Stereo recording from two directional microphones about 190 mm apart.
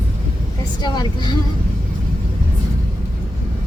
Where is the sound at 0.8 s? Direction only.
25° left (ahead or behind).